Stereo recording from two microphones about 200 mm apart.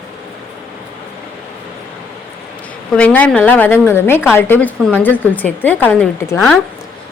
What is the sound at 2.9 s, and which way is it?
Speech, 5° left (ahead or behind).